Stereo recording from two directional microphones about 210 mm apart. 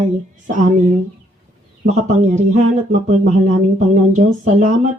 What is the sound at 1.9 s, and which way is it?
Speech, 35° right (ahead or behind).